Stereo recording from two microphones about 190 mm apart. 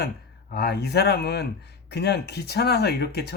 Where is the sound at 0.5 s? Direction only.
55° left (ahead or behind).